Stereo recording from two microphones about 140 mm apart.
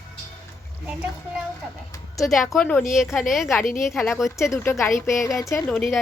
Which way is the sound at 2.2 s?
Centre (ahead or behind).